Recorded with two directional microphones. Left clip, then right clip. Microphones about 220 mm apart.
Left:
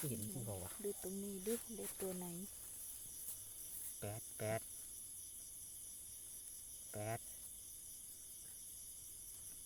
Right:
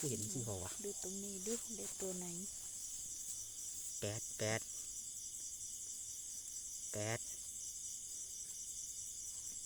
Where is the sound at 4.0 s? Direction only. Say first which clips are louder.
Right 4 dB; 40° right (ahead or behind).